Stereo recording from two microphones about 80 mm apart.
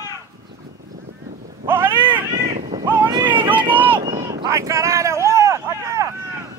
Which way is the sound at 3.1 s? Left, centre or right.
Right.